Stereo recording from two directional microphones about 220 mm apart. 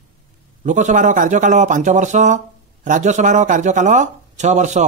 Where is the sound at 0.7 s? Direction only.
35° right (ahead or behind).